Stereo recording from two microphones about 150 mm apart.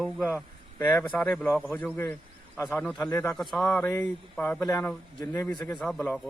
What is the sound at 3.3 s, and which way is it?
A man's voice, centre (ahead or behind).